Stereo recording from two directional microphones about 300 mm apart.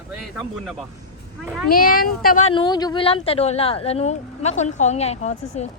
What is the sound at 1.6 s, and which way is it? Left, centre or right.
Speech, left.